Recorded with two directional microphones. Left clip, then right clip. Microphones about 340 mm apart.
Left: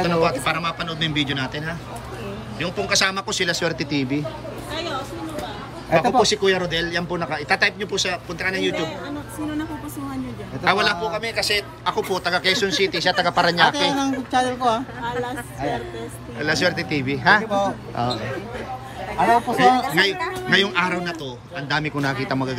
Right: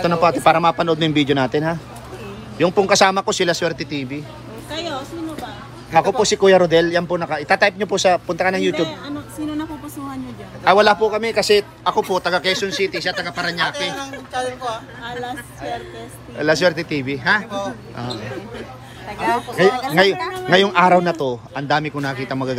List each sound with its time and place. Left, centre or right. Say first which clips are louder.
0.0 s a man's voice: right 5 dB; centre
4.7 s a sound: right 2 dB; right
5.9 s a man's voice: right 2 dB; centre
10.6 s a man's voice: right 6 dB; centre
14.3 s speech: left 4 dB; left
16.3 s a man's voice: right 5 dB; centre
17.5 s speech: left 4 dB; left
19.2 s a man's voice: left 1 dB; centre